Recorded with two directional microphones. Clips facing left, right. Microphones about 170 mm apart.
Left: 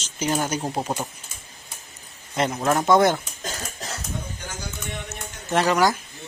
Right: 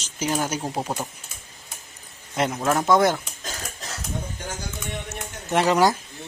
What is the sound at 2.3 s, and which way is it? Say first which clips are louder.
Speech: left 1 dB; centre (ahead or behind).